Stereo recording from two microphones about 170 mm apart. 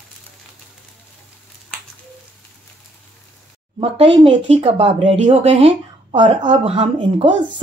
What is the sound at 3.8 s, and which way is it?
Speech, 35° right (ahead or behind).